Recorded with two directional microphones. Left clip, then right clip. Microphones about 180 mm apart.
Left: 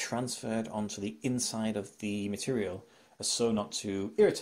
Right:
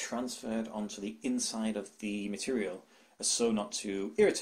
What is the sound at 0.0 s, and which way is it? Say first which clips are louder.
Speech: left 2 dB; 40° left (ahead or behind).